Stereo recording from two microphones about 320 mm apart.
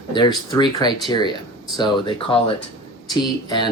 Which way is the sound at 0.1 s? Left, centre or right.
Centre.